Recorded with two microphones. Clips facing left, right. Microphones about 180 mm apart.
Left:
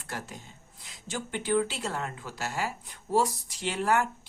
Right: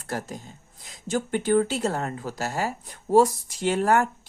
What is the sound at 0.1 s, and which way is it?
Speech, 40° right (ahead or behind).